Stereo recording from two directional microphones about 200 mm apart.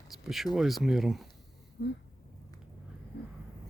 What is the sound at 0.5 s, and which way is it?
Speech, centre (ahead or behind).